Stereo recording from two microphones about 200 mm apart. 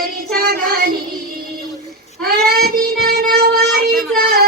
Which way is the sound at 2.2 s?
50° right (ahead or behind).